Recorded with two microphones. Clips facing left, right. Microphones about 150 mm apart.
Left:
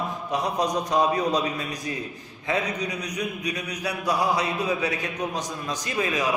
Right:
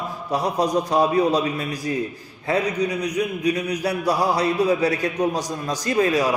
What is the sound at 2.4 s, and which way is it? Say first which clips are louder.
A man's voice: right 5 dB; 30° right (ahead or behind).